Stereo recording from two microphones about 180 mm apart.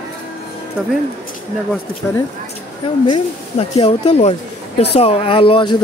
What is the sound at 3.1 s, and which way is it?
Speech, 30° left (ahead or behind).